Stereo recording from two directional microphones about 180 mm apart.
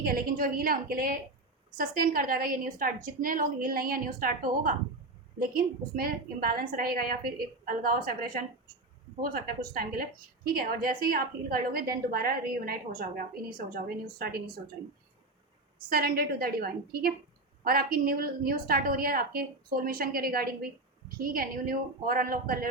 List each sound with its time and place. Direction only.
0.0 s a woman's voice: 55° right (ahead or behind)
15.9 s a woman's voice: 55° right (ahead or behind)